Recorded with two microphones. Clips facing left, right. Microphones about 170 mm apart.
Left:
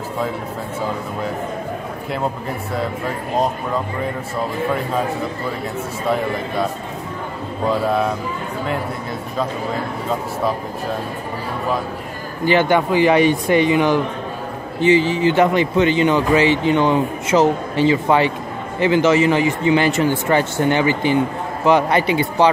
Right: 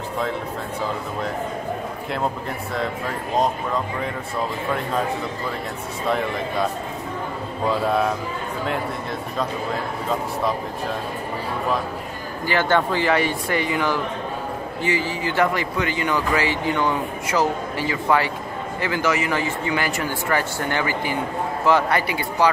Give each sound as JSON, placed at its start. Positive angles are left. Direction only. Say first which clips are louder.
{"t": 12.4, "sound": "speech", "louder": "left 5 dB", "side_deg": 15}